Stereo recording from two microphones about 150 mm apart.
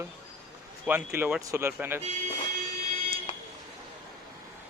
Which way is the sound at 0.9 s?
10° right (ahead or behind).